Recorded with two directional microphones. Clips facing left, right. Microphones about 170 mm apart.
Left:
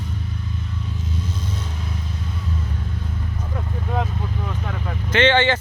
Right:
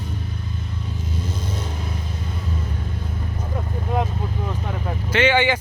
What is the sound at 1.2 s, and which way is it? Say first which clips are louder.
Vehicle: right 1 dB; 40° right (ahead or behind).